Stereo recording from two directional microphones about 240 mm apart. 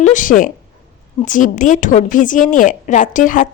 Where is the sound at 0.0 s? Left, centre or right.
Left.